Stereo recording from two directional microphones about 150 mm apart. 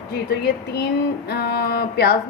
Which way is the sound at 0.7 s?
90° left.